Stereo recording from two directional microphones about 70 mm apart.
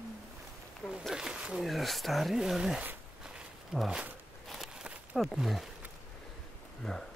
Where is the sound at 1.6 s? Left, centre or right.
Centre.